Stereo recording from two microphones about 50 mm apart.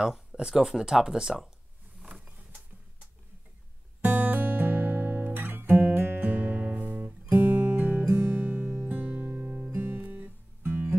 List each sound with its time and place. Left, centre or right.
0.4 s speech: centre
2.1 s mechanisms: centre
4.0 s guitar: right
7.2 s music: right